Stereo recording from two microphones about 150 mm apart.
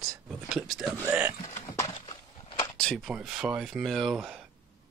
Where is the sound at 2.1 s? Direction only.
30° left (ahead or behind).